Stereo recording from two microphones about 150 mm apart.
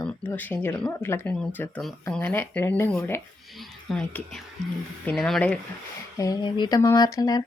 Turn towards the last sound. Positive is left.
turn(degrees=25)  # may be behind; listen again after turning